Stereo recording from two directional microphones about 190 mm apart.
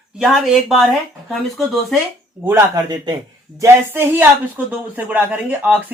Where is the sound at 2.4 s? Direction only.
10° right (ahead or behind).